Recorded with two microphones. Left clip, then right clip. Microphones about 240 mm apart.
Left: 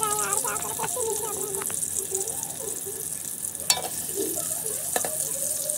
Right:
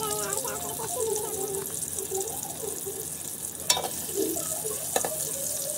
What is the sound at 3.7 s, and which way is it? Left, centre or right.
Frying, centre.